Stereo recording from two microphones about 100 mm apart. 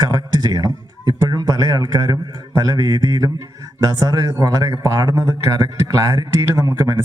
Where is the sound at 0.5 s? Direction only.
40° right (ahead or behind).